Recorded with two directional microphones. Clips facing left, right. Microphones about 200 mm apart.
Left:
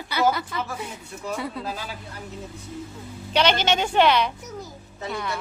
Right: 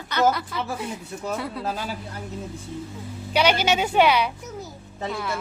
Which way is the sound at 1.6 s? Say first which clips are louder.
Right 4 dB; 40° right (ahead or behind).